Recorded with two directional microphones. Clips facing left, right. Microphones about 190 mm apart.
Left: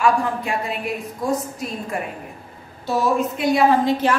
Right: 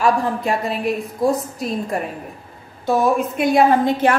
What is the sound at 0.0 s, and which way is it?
Speech, 40° right (ahead or behind).